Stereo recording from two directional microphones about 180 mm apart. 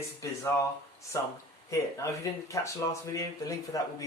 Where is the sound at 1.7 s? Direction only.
15° left (ahead or behind).